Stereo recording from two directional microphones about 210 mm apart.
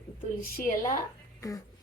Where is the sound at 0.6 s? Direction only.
40° left (ahead or behind).